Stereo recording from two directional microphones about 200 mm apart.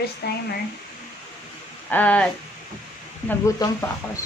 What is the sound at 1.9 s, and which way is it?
Speech, 5° left (ahead or behind).